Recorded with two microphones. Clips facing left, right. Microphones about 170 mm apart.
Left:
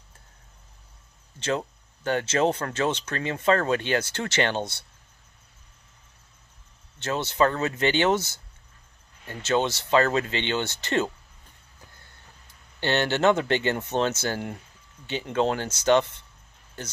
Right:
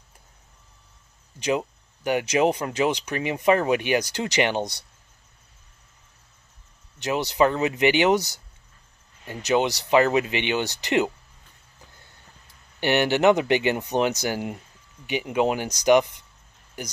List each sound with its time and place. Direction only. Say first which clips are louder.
1.4 s speech: right 3 dB; 15° right (ahead or behind)
7.0 s speech: right 2 dB; 15° right (ahead or behind)
12.8 s speech: right 3 dB; 15° right (ahead or behind)